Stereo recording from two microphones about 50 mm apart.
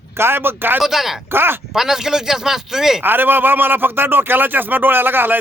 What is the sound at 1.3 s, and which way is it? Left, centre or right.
Speech, right.